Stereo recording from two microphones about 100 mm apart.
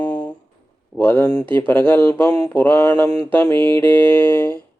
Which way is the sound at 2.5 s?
15° left (ahead or behind).